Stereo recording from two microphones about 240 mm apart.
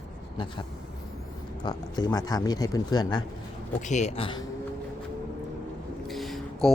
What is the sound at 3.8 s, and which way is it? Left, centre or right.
Speech, left.